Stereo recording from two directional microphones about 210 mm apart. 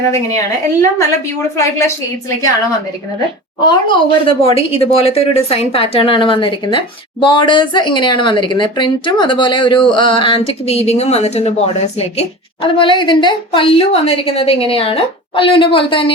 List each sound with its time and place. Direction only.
0.1 s speech: 15° left (ahead or behind)
3.7 s a woman's voice: 20° left (ahead or behind)